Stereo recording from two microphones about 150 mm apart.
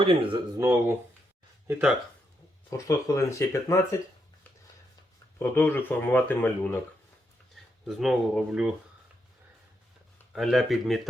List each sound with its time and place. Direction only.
0.0 s speech: 35° right (ahead or behind)
0.6 s speech: 15° right (ahead or behind)
2.6 s speech: 20° left (ahead or behind)
5.4 s speech: 15° left (ahead or behind)
7.5 s speech: centre (ahead or behind)
10.3 s speech: centre (ahead or behind)